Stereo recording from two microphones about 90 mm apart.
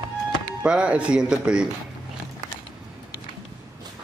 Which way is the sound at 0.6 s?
10° right (ahead or behind).